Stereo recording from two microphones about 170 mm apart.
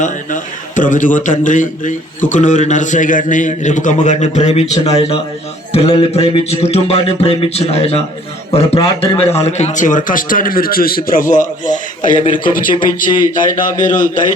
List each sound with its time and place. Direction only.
0.0 s a man's voice: 50° left (ahead or behind)
13.1 s a man's voice: 25° left (ahead or behind)
13.8 s a man's voice: 50° left (ahead or behind)